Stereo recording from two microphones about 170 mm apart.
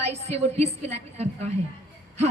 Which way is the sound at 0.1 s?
40° right (ahead or behind).